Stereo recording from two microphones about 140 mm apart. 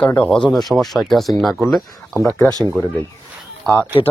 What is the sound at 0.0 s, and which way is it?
Speech, 5° left (ahead or behind).